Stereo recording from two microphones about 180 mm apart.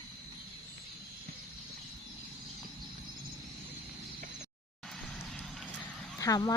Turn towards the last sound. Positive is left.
turn(degrees=20)  # may be behind; listen again after turning